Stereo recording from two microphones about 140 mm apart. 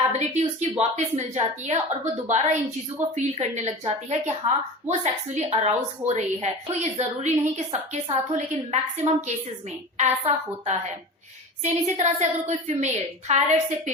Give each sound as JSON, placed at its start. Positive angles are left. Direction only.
{"t": 0.1, "sound": "a woman's voice", "side_deg": -50}